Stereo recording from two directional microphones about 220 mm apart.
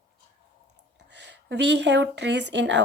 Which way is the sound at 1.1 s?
50° right (ahead or behind).